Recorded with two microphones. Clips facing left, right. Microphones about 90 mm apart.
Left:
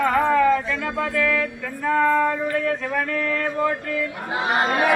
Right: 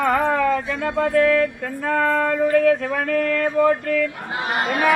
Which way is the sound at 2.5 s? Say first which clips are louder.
Right 6 dB; 60° right (ahead or behind).